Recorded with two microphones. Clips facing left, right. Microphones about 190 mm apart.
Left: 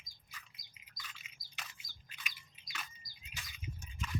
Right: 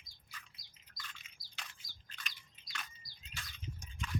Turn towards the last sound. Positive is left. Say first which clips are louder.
# left 1 dB
turn(degrees=10)  # may be behind; listen again after turning